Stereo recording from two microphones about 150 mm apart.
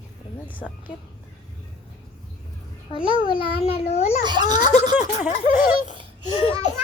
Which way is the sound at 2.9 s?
35° left (ahead or behind).